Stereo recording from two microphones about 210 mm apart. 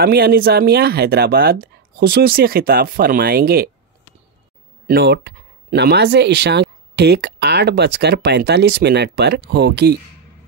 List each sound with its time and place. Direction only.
0.0 s speech: 45° right (ahead or behind)
4.8 s speech: 50° right (ahead or behind)